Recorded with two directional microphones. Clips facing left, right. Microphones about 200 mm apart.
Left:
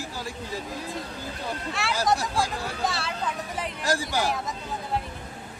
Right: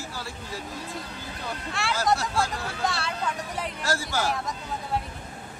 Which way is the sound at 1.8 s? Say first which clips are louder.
Right 1 dB; centre (ahead or behind).